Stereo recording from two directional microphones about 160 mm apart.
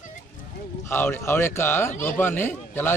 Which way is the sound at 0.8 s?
15° left (ahead or behind).